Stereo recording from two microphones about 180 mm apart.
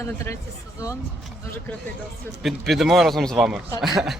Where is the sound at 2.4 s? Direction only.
Centre (ahead or behind).